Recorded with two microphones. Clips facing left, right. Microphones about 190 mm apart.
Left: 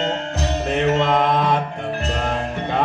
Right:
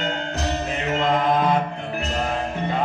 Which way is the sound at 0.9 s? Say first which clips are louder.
Left 2 dB; 85° left.